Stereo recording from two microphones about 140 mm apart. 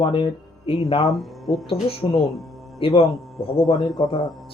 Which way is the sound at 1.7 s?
45° left (ahead or behind).